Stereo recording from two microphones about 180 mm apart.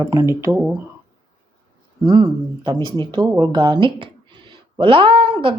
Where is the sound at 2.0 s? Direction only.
20° right (ahead or behind).